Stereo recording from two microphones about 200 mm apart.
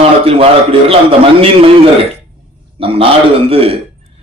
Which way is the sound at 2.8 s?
30° right (ahead or behind).